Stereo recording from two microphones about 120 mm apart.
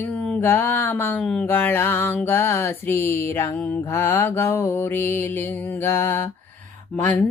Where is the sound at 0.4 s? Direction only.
15° left (ahead or behind).